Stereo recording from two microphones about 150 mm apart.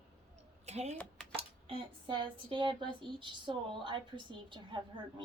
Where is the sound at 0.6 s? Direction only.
45° right (ahead or behind).